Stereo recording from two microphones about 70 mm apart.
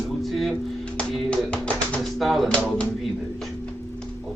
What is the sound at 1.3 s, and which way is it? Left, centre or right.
Speech, centre.